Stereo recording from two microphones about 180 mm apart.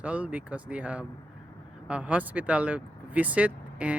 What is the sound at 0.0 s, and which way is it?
Speech, 10° right (ahead or behind).